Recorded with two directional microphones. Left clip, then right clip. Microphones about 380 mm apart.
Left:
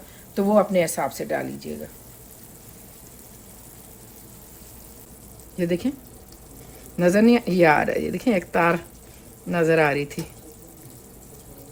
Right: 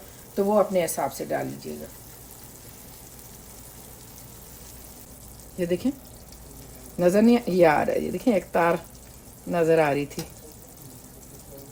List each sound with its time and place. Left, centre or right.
0.3 s speech: left
5.5 s speech: left
7.0 s speech: left